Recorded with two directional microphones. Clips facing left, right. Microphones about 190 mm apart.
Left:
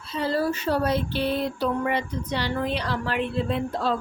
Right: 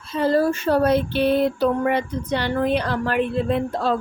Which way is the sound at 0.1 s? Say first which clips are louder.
Right 6 dB; 50° right (ahead or behind).